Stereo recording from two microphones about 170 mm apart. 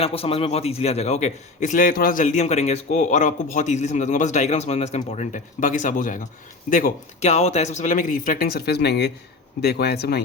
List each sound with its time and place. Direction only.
0.0 s a man's voice: 35° left (ahead or behind); by 7.3 s 55° left (ahead or behind)
7.3 s speech: 40° left (ahead or behind); by 10.2 s 70° left (ahead or behind)